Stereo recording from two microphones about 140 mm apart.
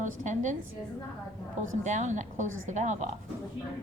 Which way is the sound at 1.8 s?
60° right (ahead or behind).